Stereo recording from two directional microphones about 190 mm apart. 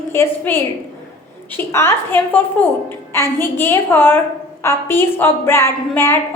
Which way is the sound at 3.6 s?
10° left (ahead or behind).